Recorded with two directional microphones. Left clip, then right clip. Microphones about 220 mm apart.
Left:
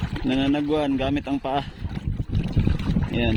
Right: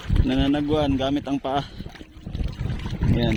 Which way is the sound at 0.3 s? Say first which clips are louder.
Even; centre (ahead or behind).